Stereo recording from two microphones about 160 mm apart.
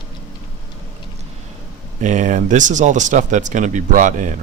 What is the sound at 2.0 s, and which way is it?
Speech, 50° right (ahead or behind).